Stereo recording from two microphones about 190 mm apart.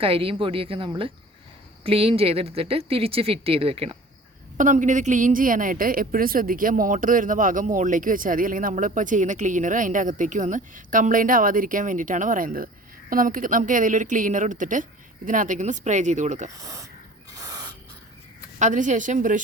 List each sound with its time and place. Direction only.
0.0 s a woman's voice: 30° right (ahead or behind)
4.5 s a woman's voice: 45° right (ahead or behind)
16.6 s speech: 15° right (ahead or behind)
17.3 s spray: 20° right (ahead or behind)
18.6 s a woman's voice: 40° right (ahead or behind)